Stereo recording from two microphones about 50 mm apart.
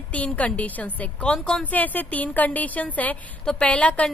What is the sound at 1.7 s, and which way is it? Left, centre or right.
Speech, left.